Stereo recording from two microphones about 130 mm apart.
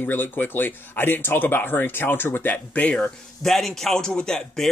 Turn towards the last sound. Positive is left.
turn(degrees=5)  # may be behind; listen again after turning